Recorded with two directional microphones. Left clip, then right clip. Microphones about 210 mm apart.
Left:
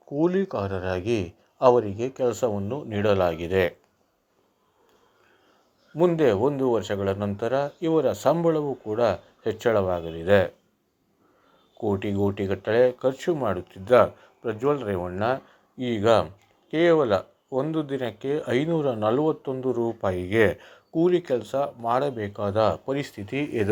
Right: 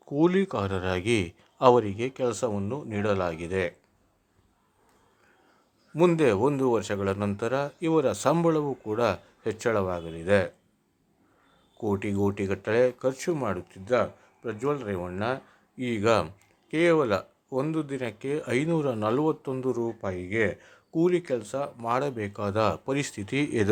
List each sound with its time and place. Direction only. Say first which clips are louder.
0.0 s a man's voice: even; 20° right (ahead or behind); by 3.8 s 5° left (ahead or behind)
5.9 s a man's voice: left 2 dB; 20° right (ahead or behind)
11.8 s a man's voice: left 2 dB; 10° right (ahead or behind)
13.8 s a man's voice: left 8 dB; 5° left (ahead or behind)
20.9 s a man's voice: left 3 dB; 10° right (ahead or behind)